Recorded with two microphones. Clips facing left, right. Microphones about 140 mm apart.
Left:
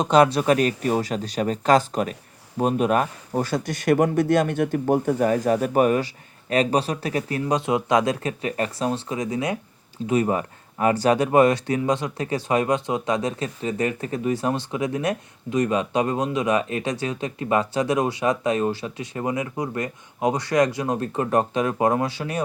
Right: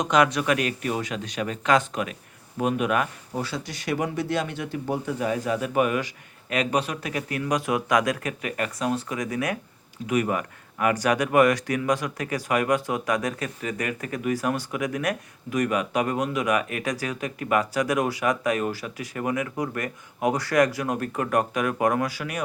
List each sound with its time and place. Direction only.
0.0 s speech: 30° left (ahead or behind)